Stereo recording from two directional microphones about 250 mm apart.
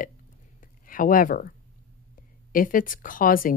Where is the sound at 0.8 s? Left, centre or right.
Left.